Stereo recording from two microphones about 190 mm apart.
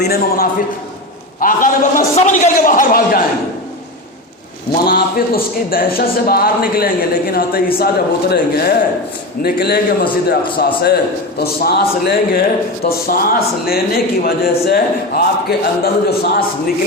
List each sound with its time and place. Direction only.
0.0 s a man's voice: 55° left (ahead or behind)
4.9 s a man's voice: 50° left (ahead or behind)